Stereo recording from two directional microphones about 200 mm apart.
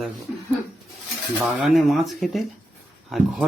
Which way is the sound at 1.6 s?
Centre (ahead or behind).